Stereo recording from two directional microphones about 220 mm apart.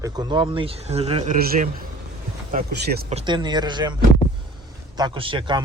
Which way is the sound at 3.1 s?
25° right (ahead or behind).